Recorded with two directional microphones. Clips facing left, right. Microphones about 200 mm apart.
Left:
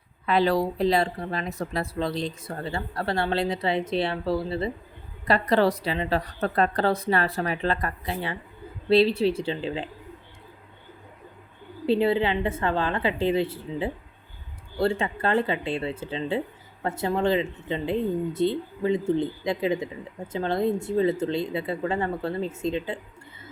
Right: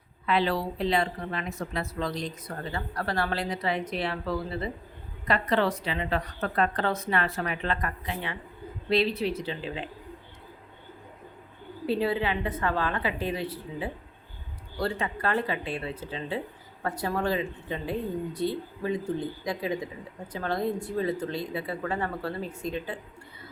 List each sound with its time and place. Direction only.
0.3 s a woman's voice: 40° left (ahead or behind)
11.9 s speech: 25° left (ahead or behind)